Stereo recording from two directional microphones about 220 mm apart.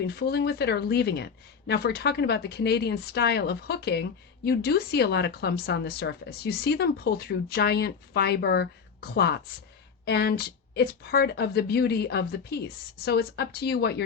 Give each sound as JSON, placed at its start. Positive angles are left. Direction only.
{"t": 0.0, "sound": "speech", "side_deg": 45}